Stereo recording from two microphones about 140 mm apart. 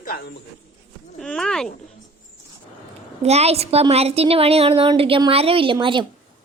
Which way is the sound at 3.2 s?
50° right (ahead or behind).